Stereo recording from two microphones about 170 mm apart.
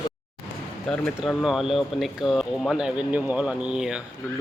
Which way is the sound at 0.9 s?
Centre (ahead or behind).